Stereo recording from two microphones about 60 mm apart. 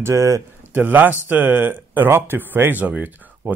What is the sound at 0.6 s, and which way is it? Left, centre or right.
Speech, right.